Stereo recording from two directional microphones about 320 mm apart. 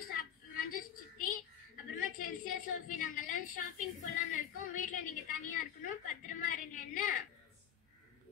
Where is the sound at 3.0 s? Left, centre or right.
Left.